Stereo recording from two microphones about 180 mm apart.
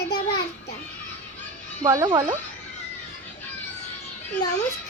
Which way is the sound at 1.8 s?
20° right (ahead or behind).